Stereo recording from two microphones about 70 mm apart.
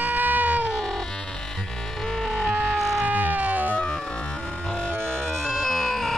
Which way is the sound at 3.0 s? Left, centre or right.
Right.